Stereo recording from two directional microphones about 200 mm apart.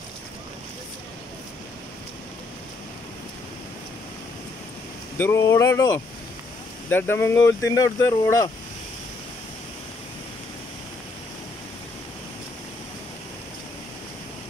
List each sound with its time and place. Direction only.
5.1 s speech: 10° left (ahead or behind)